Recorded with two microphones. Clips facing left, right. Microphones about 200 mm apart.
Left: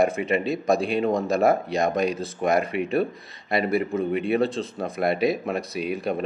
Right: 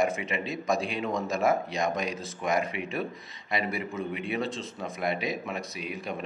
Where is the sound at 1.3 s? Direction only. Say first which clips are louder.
Left 4 dB; 60° left (ahead or behind).